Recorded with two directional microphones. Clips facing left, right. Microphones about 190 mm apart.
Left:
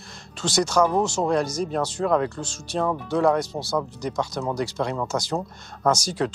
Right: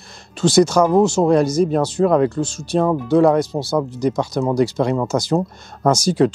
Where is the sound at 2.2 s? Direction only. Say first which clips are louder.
Right 11 dB; 5° right (ahead or behind).